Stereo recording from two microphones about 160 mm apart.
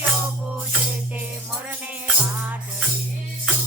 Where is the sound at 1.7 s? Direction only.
10° right (ahead or behind).